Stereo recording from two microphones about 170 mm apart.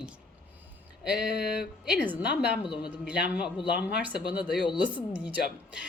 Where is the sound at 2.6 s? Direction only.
30° left (ahead or behind).